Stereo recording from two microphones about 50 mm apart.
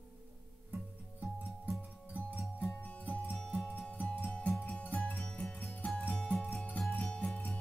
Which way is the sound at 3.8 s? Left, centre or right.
Left.